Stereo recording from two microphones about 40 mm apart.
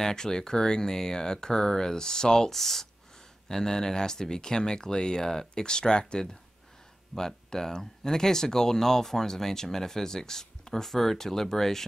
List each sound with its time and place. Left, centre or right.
0.0 s speech: centre